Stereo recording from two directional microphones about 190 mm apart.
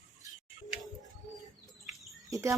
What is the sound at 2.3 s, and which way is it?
Speech, 15° right (ahead or behind).